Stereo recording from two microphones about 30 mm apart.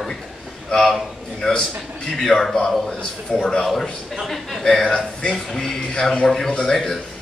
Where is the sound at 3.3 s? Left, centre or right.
Left.